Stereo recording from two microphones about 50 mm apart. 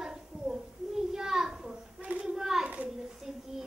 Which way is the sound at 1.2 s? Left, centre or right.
Centre.